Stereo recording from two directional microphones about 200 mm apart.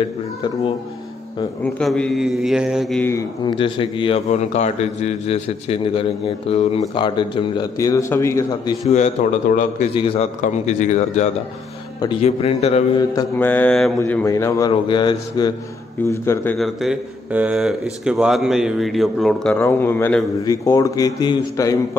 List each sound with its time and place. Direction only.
1.8 s speech: 5° left (ahead or behind)
3.1 s speech: 15° left (ahead or behind)
3.5 s a man's voice: 25° left (ahead or behind)
8.8 s a man's voice: 35° left (ahead or behind)
13.1 s speech: 10° left (ahead or behind)
16.5 s speech: centre (ahead or behind); by 21.7 s 20° left (ahead or behind)